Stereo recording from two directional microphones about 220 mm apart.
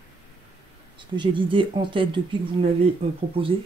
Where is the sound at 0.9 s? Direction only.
20° right (ahead or behind).